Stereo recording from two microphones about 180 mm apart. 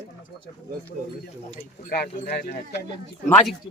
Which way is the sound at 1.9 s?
60° left (ahead or behind).